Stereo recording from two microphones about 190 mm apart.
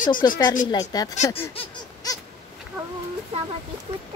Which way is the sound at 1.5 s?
20° left (ahead or behind).